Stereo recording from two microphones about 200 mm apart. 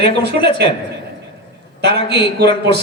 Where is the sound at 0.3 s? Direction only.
25° left (ahead or behind).